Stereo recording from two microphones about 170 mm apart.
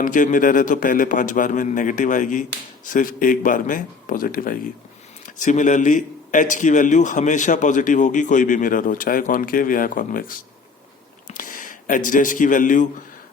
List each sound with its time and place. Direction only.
0.0 s a man's voice: 50° left (ahead or behind)